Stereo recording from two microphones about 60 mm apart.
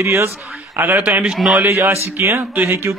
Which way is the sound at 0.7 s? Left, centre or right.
Right.